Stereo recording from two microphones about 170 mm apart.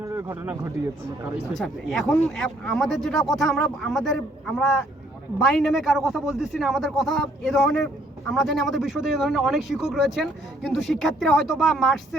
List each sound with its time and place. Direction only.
0.0 s speech: 15° right (ahead or behind)
1.5 s a man's voice: centre (ahead or behind)